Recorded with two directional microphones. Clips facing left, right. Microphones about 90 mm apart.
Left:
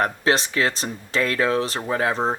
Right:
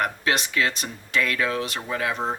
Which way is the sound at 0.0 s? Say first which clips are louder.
Left 4 dB; 30° left (ahead or behind).